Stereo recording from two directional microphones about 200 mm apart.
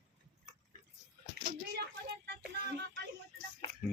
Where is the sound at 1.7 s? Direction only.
55° right (ahead or behind).